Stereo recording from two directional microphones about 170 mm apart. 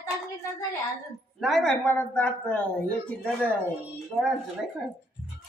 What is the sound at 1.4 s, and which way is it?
A woman's voice, centre (ahead or behind).